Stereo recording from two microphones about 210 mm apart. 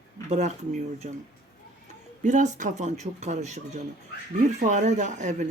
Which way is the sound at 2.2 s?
35° right (ahead or behind).